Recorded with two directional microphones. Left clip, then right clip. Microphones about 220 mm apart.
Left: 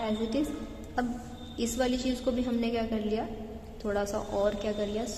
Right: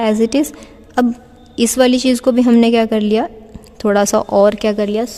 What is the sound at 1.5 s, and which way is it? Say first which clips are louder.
A woman's voice: right 17 dB; 50° right (ahead or behind).